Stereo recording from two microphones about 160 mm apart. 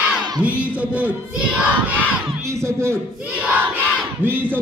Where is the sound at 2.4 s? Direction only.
20° right (ahead or behind).